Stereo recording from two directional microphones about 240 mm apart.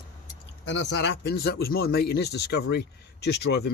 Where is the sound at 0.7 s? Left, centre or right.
Left.